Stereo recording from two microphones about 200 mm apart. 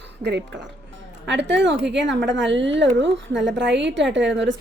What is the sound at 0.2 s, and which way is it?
Speech, 60° right (ahead or behind).